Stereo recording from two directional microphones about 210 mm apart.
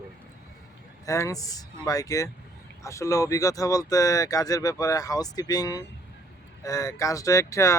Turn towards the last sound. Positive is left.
turn(degrees=15)  # may be behind; listen again after turning